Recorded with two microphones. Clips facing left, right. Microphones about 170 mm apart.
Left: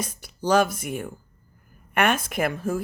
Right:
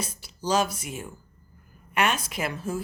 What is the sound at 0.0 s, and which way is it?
Speech, 50° left (ahead or behind).